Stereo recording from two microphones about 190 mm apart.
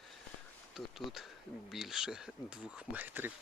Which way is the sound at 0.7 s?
Centre (ahead or behind).